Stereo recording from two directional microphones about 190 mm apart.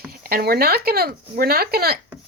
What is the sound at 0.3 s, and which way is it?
Speech, 50° right (ahead or behind).